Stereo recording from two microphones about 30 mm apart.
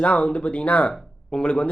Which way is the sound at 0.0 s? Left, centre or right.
Left.